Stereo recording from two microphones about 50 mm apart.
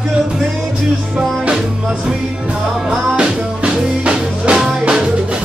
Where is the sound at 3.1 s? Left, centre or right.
Centre.